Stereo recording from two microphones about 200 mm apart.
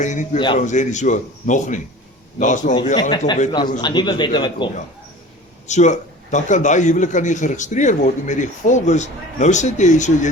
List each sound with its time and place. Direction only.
0.0 s a man's voice: 40° left (ahead or behind)
0.3 s a man's voice: 25° left (ahead or behind)
0.6 s a man's voice: 40° left (ahead or behind)
2.9 s a man's voice: 20° left (ahead or behind)
5.6 s a man's voice: 35° left (ahead or behind)